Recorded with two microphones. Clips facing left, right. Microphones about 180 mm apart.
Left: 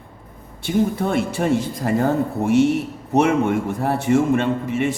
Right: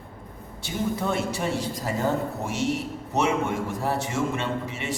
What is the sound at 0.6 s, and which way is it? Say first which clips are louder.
A man's voice: left 8 dB; 55° left (ahead or behind).